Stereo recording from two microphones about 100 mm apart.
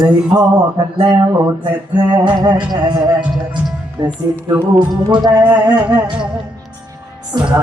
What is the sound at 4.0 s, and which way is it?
Speech, 25° right (ahead or behind).